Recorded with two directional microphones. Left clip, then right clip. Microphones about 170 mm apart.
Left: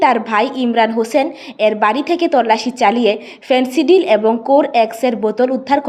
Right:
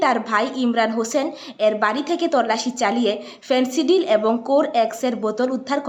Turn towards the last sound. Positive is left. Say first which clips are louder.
# left 8 dB
turn(degrees=15)  # may be behind; listen again after turning